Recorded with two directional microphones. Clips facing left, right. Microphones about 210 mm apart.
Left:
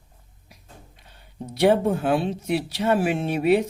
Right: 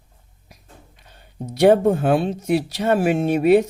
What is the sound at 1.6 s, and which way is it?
Speech, 45° right (ahead or behind).